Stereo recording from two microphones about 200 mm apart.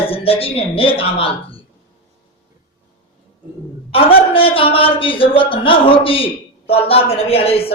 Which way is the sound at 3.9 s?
30° left (ahead or behind).